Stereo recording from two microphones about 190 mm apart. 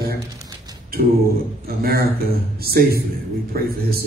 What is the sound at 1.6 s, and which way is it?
Speech, 55° right (ahead or behind).